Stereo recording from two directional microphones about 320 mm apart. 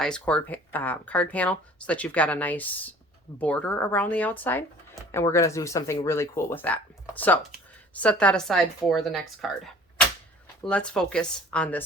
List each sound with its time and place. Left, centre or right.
0.0 s speech: centre